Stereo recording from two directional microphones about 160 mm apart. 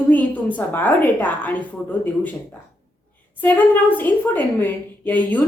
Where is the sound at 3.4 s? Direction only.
10° left (ahead or behind).